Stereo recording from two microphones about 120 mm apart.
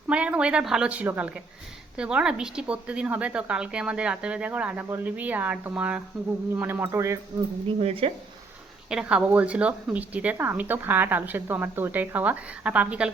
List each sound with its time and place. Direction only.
0.1 s a woman's voice: 10° right (ahead or behind)
7.8 s speech: 55° right (ahead or behind)
8.9 s a woman's voice: 10° right (ahead or behind)